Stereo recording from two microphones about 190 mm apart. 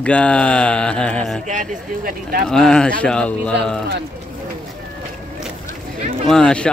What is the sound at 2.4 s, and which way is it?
Speech, 5° left (ahead or behind).